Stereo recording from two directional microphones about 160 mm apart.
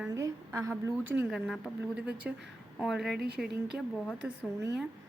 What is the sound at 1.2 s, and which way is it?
A woman's voice, centre (ahead or behind).